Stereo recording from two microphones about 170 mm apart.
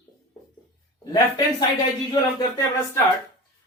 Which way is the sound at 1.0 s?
20° left (ahead or behind).